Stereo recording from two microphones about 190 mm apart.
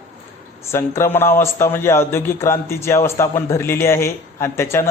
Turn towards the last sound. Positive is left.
turn(degrees=15)  # may be behind; listen again after turning